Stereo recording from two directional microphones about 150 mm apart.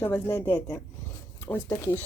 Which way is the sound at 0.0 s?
15° left (ahead or behind).